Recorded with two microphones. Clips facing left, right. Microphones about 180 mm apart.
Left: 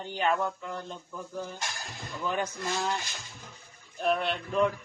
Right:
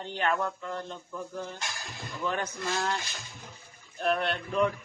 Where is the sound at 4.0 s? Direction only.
Centre (ahead or behind).